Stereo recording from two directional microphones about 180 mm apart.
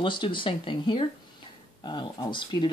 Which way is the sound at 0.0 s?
25° left (ahead or behind).